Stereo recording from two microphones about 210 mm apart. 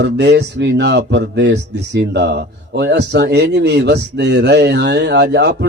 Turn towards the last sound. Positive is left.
turn(degrees=-55)  # may be behind; listen again after turning